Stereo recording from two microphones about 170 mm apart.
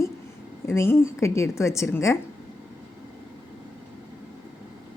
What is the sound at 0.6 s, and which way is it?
A woman's voice, 15° left (ahead or behind).